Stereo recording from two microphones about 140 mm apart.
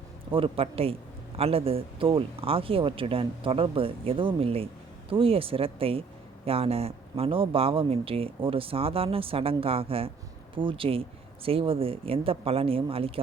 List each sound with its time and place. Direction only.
0.3 s speech: 40° right (ahead or behind)